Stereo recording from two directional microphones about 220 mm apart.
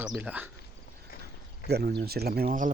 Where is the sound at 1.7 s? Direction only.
45° right (ahead or behind).